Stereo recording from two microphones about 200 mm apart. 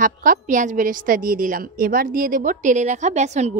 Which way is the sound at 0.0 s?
40° right (ahead or behind).